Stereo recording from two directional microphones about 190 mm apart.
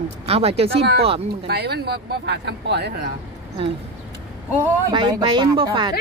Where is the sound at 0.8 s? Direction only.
60° right (ahead or behind).